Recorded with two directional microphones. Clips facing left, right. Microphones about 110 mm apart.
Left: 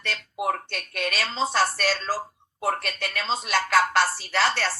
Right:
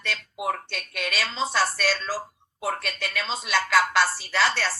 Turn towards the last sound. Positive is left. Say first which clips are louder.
# even
turn(degrees=45)  # may be behind; listen again after turning